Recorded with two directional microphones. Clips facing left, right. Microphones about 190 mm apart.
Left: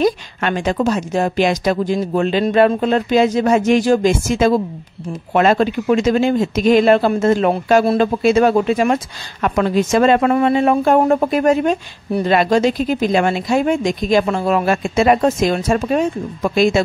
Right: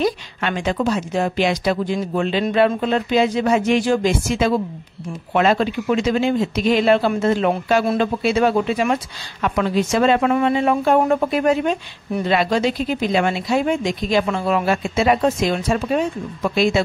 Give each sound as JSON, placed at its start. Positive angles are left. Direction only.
{"t": 0.0, "sound": "speech", "side_deg": 45}
{"t": 7.8, "sound": "speech", "side_deg": 35}
{"t": 8.2, "sound": "speech", "side_deg": 45}